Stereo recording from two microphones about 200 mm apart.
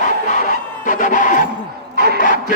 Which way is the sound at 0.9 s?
40° left (ahead or behind).